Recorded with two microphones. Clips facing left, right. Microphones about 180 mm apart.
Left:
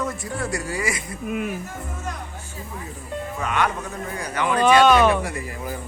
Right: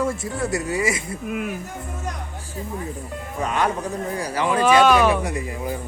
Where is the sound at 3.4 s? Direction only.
35° right (ahead or behind).